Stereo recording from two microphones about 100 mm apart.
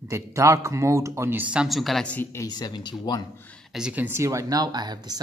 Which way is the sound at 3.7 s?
5° right (ahead or behind).